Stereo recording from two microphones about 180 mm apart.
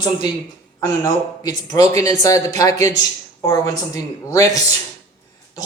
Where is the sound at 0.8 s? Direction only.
20° left (ahead or behind).